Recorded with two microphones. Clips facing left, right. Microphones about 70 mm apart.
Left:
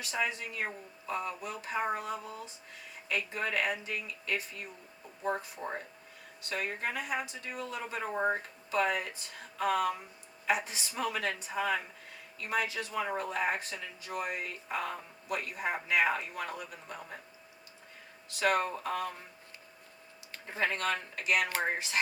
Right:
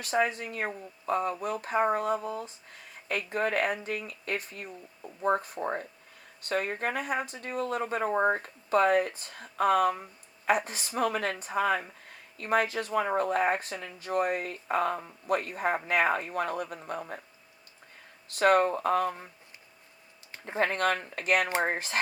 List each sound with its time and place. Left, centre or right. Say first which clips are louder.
0.0 s speech: right 6 dB; right
18.3 s speech: right 7 dB; right
20.6 s speech: right 5 dB; right